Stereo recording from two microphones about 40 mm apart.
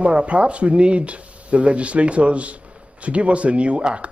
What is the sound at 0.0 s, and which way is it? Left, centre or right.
Speech, right.